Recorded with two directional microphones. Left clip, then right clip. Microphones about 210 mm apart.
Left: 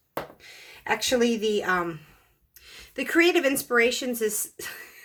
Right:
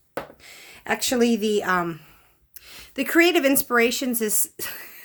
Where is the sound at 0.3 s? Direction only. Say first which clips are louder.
Right 1 dB; 45° right (ahead or behind).